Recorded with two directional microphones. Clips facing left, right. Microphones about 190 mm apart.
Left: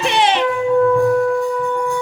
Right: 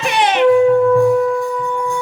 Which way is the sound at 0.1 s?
25° left (ahead or behind).